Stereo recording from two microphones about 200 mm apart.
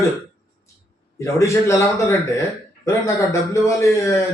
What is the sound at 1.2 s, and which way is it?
A man's voice, 15° left (ahead or behind).